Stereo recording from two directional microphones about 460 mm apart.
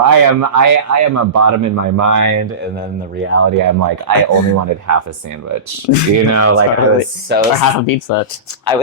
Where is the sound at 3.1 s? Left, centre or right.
Right.